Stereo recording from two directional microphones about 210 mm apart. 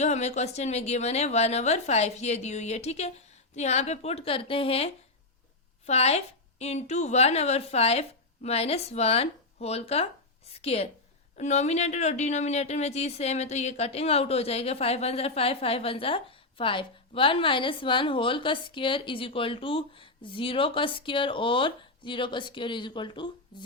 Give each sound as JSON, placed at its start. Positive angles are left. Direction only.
{"t": 0.0, "sound": "a woman's voice", "side_deg": 30}